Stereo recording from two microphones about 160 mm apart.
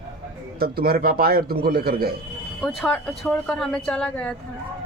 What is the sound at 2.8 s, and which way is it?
A woman's voice, 5° left (ahead or behind).